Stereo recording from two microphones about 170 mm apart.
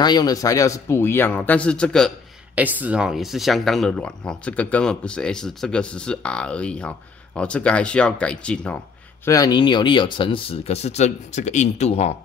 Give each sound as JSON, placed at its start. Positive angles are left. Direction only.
{"t": 0.0, "sound": "speech", "side_deg": 25}
{"t": 2.5, "sound": "speech", "side_deg": -10}
{"t": 9.2, "sound": "speech", "side_deg": 20}